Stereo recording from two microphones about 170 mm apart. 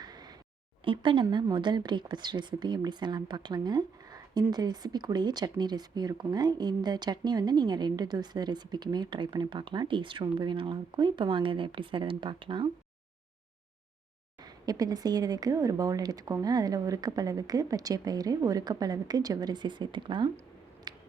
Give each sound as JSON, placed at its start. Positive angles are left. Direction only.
{"t": 0.0, "sound": "a sound", "side_deg": -25}
{"t": 0.9, "sound": "a woman's voice", "side_deg": -25}
{"t": 14.4, "sound": "a woman's voice", "side_deg": -20}
{"t": 20.9, "sound": "finger snapping", "side_deg": -25}